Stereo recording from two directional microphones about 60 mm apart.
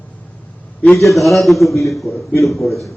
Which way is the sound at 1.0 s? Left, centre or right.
Centre.